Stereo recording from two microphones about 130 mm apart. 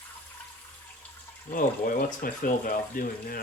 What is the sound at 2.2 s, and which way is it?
Speech, 90° left.